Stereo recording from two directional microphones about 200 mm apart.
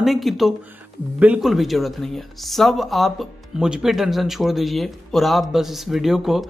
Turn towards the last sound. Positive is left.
turn(degrees=0)  # may be behind; listen again after turning